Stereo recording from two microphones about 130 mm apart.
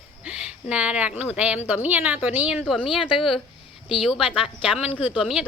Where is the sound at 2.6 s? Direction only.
5° left (ahead or behind).